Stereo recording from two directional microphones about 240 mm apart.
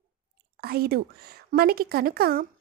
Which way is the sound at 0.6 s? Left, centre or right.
Right.